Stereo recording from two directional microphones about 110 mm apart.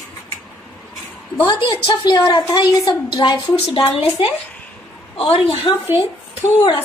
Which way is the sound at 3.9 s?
65° left (ahead or behind).